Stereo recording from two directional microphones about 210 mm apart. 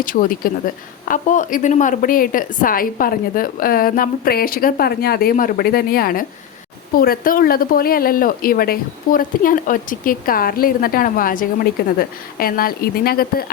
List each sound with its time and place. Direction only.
0.0 s a woman's voice: 40° left (ahead or behind)